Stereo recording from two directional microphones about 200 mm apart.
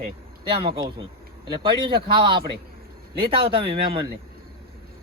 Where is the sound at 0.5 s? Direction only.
30° right (ahead or behind).